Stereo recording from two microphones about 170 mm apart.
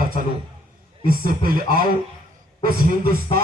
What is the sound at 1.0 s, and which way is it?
Music, 60° right (ahead or behind).